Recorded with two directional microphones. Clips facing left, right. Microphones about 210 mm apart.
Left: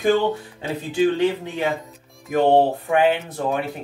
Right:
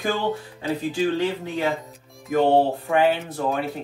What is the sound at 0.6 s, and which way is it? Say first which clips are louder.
Speech: left 4 dB; 20° left (ahead or behind).